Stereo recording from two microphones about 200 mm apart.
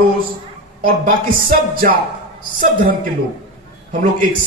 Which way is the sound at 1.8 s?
35° right (ahead or behind).